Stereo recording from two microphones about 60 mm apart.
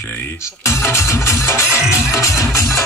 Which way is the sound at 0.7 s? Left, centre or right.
Left.